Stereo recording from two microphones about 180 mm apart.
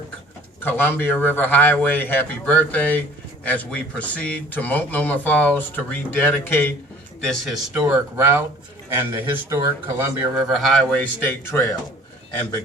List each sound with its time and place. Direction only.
0.6 s a man's voice: 10° left (ahead or behind)
7.7 s a man's voice: 10° right (ahead or behind); by 11.6 s 10° left (ahead or behind)